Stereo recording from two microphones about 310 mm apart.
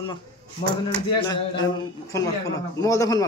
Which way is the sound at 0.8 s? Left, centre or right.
Centre.